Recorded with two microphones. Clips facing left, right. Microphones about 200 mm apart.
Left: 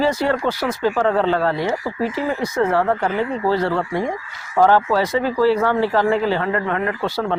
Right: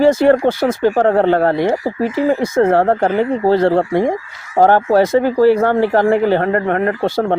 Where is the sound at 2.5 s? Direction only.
55° right (ahead or behind).